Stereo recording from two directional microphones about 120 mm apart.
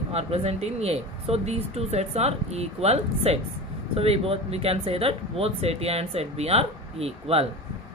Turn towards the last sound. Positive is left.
turn(degrees=-55)  # may be behind; listen again after turning